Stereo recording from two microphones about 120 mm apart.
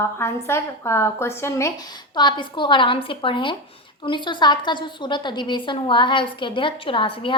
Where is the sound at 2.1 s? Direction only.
40° left (ahead or behind).